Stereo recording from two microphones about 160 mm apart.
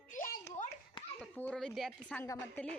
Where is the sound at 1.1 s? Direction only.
10° left (ahead or behind).